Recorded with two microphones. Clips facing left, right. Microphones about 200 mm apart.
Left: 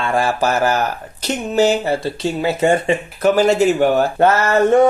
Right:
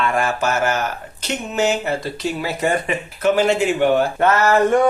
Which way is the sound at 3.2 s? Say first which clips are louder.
Left 3 dB; 40° left (ahead or behind).